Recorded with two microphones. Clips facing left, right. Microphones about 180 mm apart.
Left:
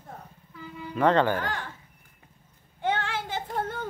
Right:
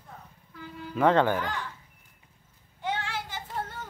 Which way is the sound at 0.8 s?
5° right (ahead or behind).